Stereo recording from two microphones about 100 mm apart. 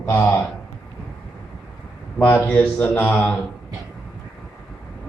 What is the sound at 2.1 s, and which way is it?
A man's voice, 15° left (ahead or behind).